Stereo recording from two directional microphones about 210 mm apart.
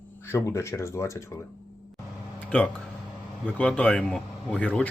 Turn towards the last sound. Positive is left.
turn(degrees=5)  # may be behind; listen again after turning